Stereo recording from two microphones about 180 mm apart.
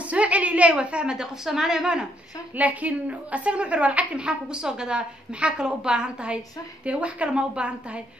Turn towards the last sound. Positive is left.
turn(degrees=-5)  # may be behind; listen again after turning